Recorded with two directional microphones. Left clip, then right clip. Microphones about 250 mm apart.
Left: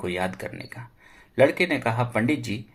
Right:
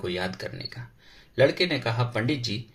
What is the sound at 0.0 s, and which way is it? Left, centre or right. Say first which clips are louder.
Speech: left 2 dB; left.